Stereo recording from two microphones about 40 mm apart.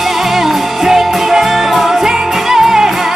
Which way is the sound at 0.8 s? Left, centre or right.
Centre.